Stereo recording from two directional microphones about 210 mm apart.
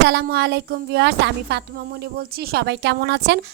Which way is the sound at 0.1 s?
50° right (ahead or behind).